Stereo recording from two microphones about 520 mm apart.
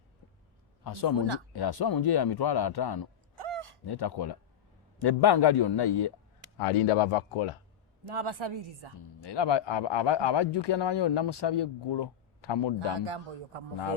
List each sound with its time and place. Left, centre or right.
0.9 s speech: left
3.3 s a sound: right
3.8 s speech: left
6.6 s speech: left
8.0 s a woman's voice: right
9.0 s speech: left
12.9 s speech: right